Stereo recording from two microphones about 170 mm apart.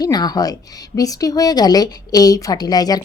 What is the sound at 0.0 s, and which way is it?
Speech, 25° left (ahead or behind).